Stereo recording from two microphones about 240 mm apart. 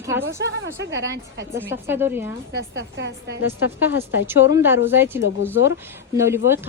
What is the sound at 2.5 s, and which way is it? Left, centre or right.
Speech, right.